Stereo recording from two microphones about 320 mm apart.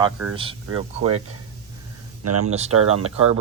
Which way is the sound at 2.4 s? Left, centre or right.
Centre.